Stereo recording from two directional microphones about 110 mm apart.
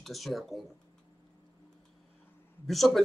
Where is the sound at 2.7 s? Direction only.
Centre (ahead or behind).